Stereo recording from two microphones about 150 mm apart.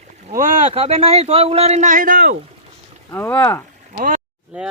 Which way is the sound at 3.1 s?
15° left (ahead or behind).